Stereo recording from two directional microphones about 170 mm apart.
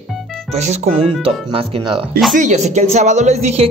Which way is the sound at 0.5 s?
40° right (ahead or behind).